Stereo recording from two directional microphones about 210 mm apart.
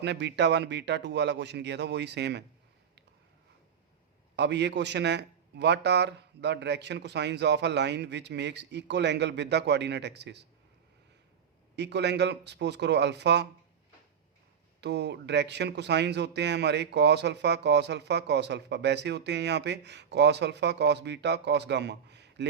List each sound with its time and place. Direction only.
0.0 s speech: 55° right (ahead or behind)
4.4 s speech: 55° right (ahead or behind)
11.8 s speech: 55° right (ahead or behind)
14.8 s speech: 55° right (ahead or behind)